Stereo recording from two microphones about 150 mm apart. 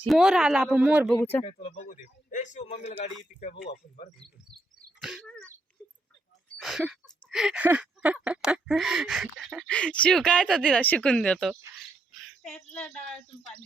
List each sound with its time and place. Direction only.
0.1 s speech: 5° right (ahead or behind)
1.2 s speech: 15° left (ahead or behind)
1.5 s speech: 45° left (ahead or behind)
4.9 s speech: centre (ahead or behind)
6.6 s speech: centre (ahead or behind)
12.2 s child singing: centre (ahead or behind)
12.7 s speech: 5° left (ahead or behind)